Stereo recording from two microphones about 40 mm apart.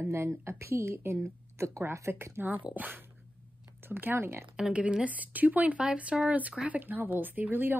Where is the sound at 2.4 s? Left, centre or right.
Right.